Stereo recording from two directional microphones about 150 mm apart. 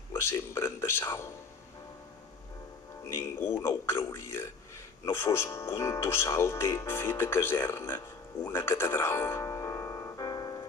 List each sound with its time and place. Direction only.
0.1 s a man's voice: 15° left (ahead or behind)
3.2 s a man's voice: 15° left (ahead or behind)